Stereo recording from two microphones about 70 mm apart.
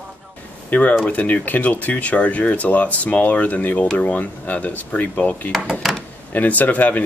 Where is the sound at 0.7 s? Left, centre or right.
Left.